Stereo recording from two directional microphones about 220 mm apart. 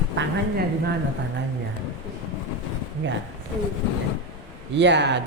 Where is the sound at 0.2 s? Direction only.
55° right (ahead or behind).